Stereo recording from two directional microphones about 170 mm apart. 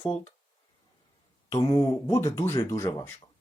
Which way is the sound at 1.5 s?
20° left (ahead or behind).